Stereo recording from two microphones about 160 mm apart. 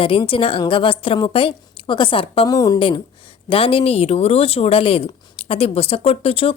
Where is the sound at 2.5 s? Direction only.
20° left (ahead or behind).